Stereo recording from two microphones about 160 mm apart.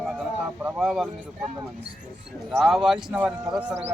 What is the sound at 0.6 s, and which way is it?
Speech, 5° right (ahead or behind).